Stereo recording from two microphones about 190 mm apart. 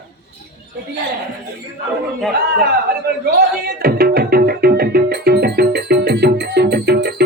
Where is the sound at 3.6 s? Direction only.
55° right (ahead or behind).